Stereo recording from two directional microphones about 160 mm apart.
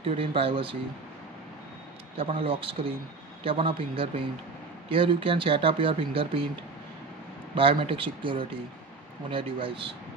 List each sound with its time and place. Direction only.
0.0 s speech: 35° right (ahead or behind)
2.1 s speech: 35° right (ahead or behind)
7.5 s speech: 35° right (ahead or behind)